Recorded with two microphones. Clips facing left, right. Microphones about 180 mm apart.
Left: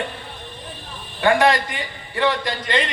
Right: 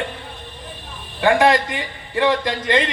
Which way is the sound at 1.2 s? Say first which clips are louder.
Right 2 dB; 20° right (ahead or behind).